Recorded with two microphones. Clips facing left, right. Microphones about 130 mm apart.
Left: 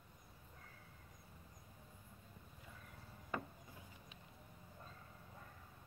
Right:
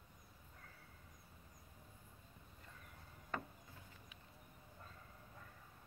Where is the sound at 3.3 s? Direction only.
10° left (ahead or behind).